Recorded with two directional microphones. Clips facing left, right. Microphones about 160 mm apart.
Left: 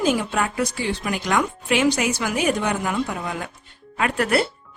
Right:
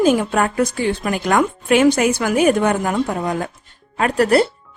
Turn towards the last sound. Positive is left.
turn(degrees=-35)  # may be behind; listen again after turning